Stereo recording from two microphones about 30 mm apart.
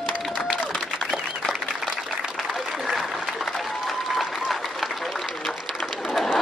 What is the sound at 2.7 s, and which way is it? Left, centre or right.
Applause, centre.